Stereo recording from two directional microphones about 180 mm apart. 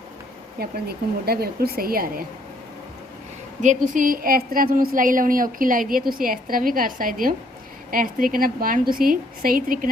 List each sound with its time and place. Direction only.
0.6 s speech: 60° right (ahead or behind)
3.6 s a woman's voice: 45° right (ahead or behind)